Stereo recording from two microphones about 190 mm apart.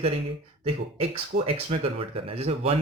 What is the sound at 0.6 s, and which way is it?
Speech, 30° right (ahead or behind).